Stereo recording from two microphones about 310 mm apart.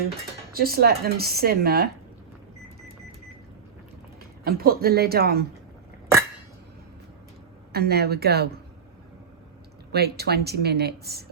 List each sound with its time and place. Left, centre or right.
0.5 s speech: right
4.2 s speech: right
7.7 s speech: right
9.9 s speech: right